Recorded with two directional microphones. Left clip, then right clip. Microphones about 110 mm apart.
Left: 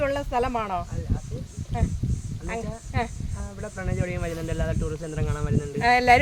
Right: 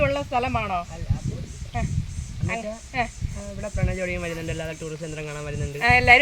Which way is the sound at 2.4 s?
30° left (ahead or behind).